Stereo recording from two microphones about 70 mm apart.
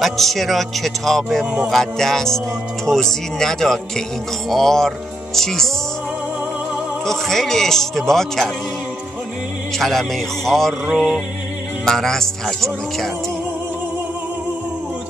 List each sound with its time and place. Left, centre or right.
0.0 s speech: centre
7.1 s speech: centre
9.8 s speech: centre
10.9 s music: centre
11.8 s speech: centre